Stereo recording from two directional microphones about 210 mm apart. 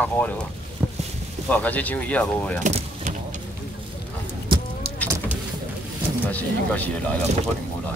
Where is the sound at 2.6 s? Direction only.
35° right (ahead or behind).